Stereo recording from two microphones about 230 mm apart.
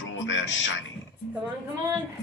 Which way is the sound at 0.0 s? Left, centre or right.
Left.